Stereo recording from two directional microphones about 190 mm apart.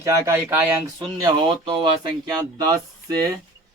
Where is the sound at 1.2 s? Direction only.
25° right (ahead or behind).